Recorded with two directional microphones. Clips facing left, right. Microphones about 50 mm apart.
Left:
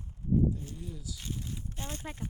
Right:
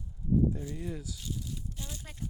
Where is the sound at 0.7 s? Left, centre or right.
Right.